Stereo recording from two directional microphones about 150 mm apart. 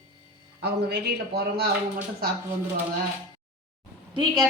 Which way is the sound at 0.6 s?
90° right.